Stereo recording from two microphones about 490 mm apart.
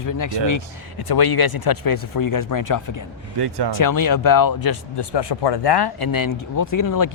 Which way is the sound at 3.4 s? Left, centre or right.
Right.